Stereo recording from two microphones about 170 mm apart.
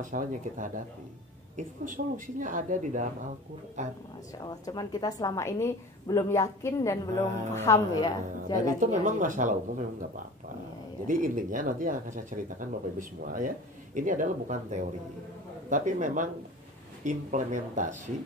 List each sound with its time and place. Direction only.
0.0 s speech: 50° right (ahead or behind)
1.9 s speech: 50° right (ahead or behind)
4.4 s a woman's voice: 25° left (ahead or behind)
8.7 s speech: 50° right (ahead or behind)